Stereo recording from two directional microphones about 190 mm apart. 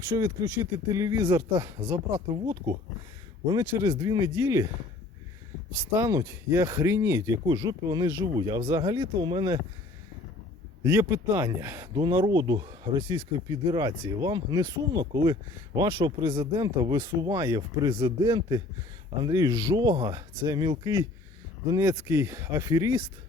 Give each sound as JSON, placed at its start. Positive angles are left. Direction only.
{"t": 0.1, "sound": "speech", "side_deg": -20}
{"t": 6.0, "sound": "speech", "side_deg": -15}
{"t": 10.8, "sound": "speech", "side_deg": -15}